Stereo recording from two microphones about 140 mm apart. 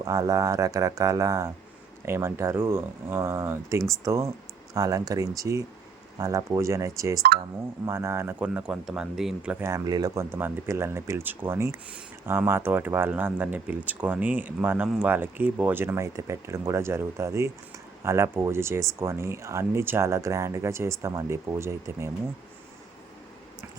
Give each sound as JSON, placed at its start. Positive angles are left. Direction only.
{"t": 0.0, "sound": "speech", "side_deg": -25}
{"t": 9.6, "sound": "speech", "side_deg": -20}